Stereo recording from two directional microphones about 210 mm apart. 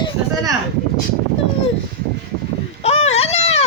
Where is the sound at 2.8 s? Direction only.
30° left (ahead or behind).